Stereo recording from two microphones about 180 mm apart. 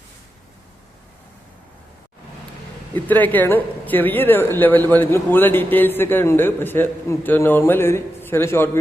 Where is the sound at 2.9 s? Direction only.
10° left (ahead or behind).